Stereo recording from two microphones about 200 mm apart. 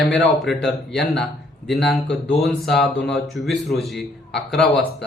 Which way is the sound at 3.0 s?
Centre (ahead or behind).